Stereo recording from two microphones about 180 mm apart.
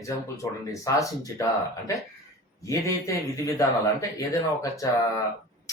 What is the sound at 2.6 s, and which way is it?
Speech, 20° left (ahead or behind).